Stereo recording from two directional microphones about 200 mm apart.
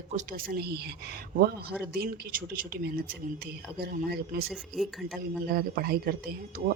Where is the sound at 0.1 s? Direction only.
45° right (ahead or behind).